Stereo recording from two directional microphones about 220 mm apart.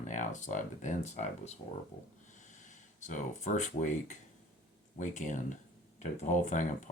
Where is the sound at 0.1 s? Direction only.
35° left (ahead or behind).